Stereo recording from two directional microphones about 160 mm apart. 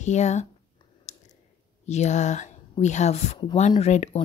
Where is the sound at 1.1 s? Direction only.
45° left (ahead or behind).